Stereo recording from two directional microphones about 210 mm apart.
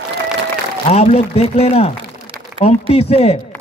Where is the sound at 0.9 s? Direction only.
30° left (ahead or behind).